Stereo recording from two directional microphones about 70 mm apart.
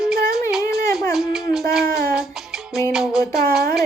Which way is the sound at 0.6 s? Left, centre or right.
Left.